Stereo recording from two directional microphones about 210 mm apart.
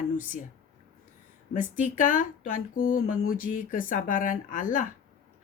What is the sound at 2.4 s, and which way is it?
Speech, 40° left (ahead or behind).